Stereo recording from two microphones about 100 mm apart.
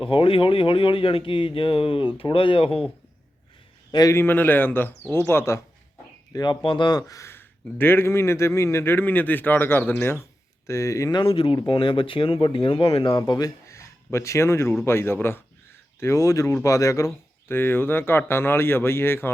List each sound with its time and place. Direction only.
0.0 s speech: 65° left (ahead or behind)
4.1 s speech: 20° left (ahead or behind)
6.3 s speech: 50° left (ahead or behind)
7.1 s speech: 30° left (ahead or behind)
11.1 s speech: 60° left (ahead or behind); by 17.1 s 35° left (ahead or behind)
17.5 s speech: 20° left (ahead or behind)